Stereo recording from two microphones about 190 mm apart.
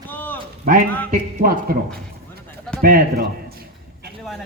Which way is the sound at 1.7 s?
50° right (ahead or behind).